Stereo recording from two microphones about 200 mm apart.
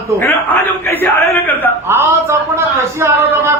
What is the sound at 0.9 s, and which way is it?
Speech, 10° left (ahead or behind).